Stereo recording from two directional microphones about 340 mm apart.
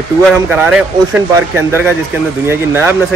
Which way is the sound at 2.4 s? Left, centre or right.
Centre.